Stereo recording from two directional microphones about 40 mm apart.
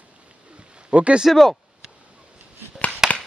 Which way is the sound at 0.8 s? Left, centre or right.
Right.